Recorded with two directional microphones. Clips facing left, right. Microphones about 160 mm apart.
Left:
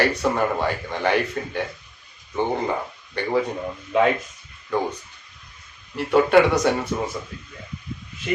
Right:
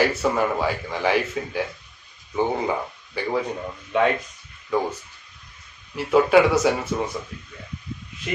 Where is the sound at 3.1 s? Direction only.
5° right (ahead or behind).